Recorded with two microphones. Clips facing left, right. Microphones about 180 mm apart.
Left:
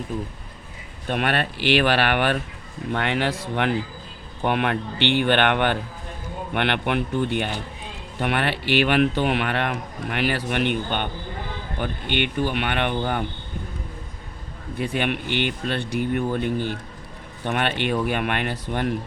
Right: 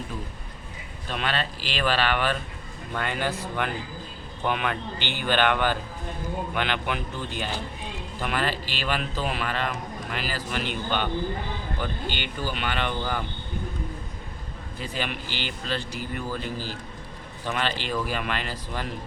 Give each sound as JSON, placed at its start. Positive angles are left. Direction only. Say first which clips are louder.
{"t": 1.0, "sound": "a man's voice", "louder": "left 5 dB", "side_deg": 60}
{"t": 14.8, "sound": "a man's voice", "louder": "left 7 dB", "side_deg": 60}